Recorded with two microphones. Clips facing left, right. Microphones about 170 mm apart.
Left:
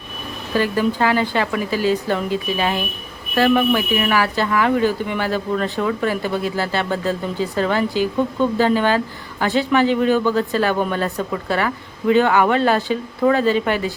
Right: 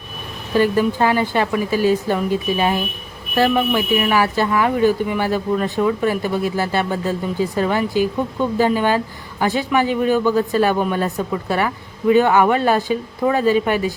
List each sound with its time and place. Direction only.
0.5 s speech: 15° right (ahead or behind)
3.3 s speech: 15° right (ahead or behind)
11.0 s speech: 15° right (ahead or behind)